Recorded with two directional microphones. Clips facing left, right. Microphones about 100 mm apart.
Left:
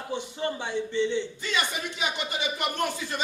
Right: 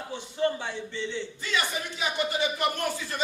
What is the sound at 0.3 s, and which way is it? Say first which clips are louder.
A man's voice: right 4 dB; 20° left (ahead or behind).